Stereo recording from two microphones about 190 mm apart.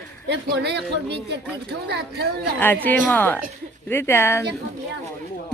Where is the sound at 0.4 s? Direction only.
60° right (ahead or behind).